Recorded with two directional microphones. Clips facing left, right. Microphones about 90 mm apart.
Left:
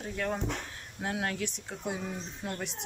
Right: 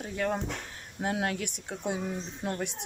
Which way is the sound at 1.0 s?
20° right (ahead or behind).